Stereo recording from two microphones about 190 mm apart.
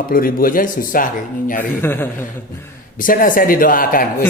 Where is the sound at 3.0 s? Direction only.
45° left (ahead or behind).